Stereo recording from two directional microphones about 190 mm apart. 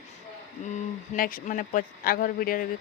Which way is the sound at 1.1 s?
45° left (ahead or behind).